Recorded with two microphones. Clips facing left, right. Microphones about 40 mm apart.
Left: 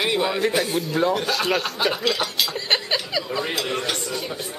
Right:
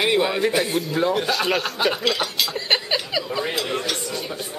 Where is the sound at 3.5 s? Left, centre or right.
Centre.